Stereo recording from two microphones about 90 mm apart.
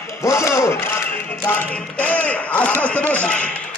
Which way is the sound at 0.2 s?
35° left (ahead or behind).